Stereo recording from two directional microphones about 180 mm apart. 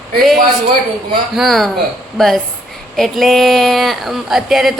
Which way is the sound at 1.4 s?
Centre (ahead or behind).